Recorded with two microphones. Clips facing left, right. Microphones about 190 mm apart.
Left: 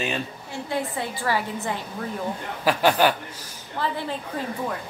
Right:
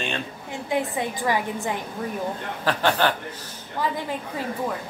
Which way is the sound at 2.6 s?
10° left (ahead or behind).